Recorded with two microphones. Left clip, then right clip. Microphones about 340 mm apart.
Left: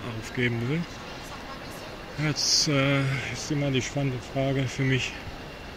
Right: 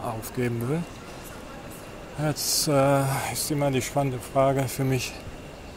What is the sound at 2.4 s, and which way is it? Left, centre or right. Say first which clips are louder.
Speech: even; right.